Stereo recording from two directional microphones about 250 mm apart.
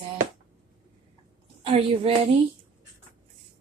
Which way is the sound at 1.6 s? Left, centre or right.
Right.